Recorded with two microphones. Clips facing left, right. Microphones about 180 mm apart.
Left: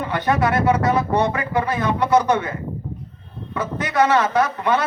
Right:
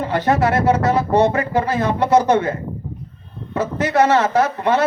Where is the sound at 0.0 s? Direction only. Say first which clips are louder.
Right 3 dB; 30° right (ahead or behind).